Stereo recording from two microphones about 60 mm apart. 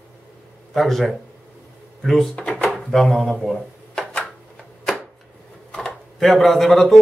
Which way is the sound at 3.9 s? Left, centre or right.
Centre.